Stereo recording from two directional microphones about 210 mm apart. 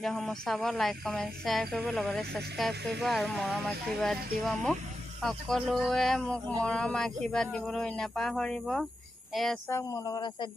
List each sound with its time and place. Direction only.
0.0 s speech: centre (ahead or behind)
9.7 s a woman's voice: 15° left (ahead or behind)